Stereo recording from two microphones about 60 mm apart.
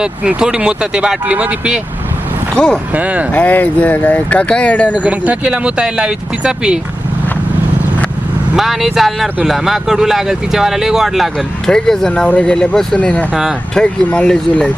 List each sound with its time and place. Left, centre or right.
0.0 s speech: centre
2.9 s speech: right
3.3 s speech: left
4.9 s speech: right
8.5 s speech: centre
11.6 s speech: centre